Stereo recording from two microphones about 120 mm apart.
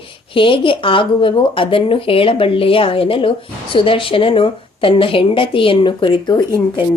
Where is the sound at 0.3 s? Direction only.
45° left (ahead or behind).